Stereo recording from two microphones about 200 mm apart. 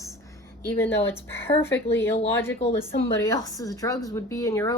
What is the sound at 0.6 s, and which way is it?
A woman's voice, 10° left (ahead or behind).